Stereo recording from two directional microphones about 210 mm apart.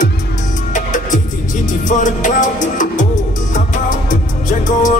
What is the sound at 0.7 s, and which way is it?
Music, 35° left (ahead or behind).